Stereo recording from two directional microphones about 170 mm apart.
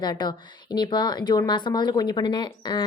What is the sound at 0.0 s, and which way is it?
A woman's voice, 25° left (ahead or behind).